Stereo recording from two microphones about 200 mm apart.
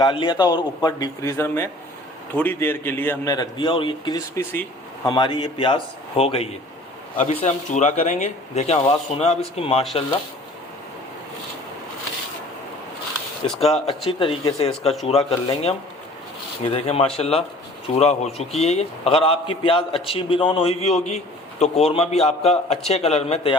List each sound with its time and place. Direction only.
0.0 s a man's voice: 25° left (ahead or behind)
13.6 s a man's voice: 30° left (ahead or behind)